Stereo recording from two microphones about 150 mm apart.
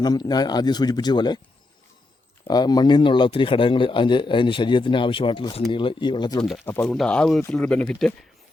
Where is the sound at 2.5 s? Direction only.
25° left (ahead or behind).